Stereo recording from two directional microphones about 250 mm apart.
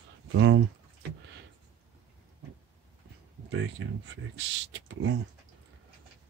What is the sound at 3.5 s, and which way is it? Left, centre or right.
Speech, right.